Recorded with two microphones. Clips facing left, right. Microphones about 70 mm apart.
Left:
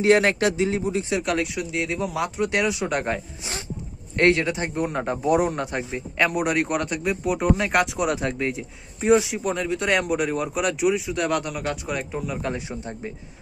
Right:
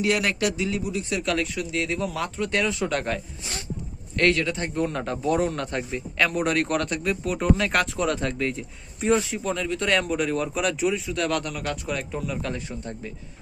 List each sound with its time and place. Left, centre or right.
0.0 s speech: left
1.1 s a man's voice: centre